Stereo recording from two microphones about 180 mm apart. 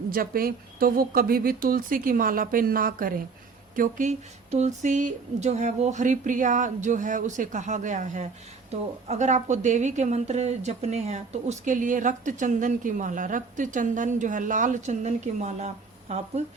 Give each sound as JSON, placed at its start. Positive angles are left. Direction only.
{"t": 0.1, "sound": "a woman's voice", "side_deg": -55}